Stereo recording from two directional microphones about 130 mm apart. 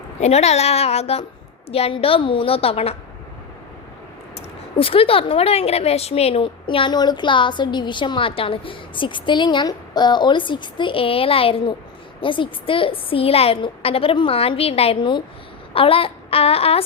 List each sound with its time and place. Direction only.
0.2 s a woman's voice: 55° left (ahead or behind)
4.4 s a woman's voice: 45° left (ahead or behind)